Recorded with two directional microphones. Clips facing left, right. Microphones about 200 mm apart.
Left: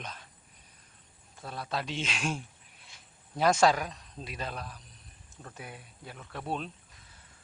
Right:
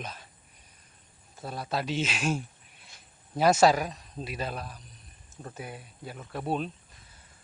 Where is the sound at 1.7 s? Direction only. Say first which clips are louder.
Right 5 dB; 5° right (ahead or behind).